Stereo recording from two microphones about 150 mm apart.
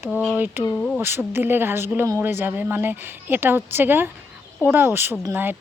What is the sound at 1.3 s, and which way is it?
Speech, 15° right (ahead or behind).